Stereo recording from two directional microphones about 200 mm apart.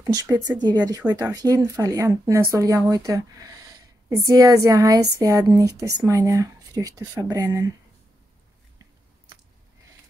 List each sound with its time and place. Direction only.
0.0 s speech: 20° right (ahead or behind)